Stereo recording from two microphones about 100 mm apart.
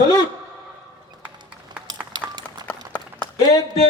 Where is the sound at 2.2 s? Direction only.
45° right (ahead or behind).